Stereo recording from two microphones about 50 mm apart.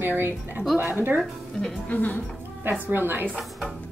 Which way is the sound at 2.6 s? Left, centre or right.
Right.